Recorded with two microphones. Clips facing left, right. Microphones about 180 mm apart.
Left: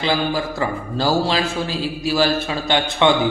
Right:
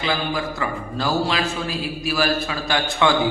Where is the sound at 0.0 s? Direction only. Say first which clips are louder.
Left 3 dB; 30° left (ahead or behind).